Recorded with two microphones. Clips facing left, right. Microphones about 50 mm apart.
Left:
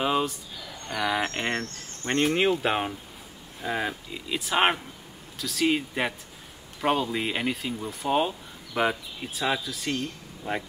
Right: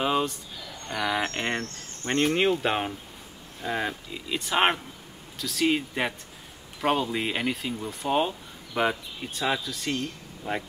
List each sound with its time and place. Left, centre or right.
0.0 s speech: centre